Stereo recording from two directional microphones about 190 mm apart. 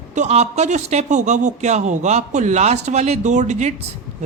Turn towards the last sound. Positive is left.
turn(degrees=-40)  # may be behind; listen again after turning